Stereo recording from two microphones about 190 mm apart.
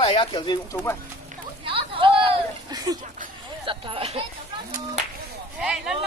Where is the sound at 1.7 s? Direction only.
25° right (ahead or behind).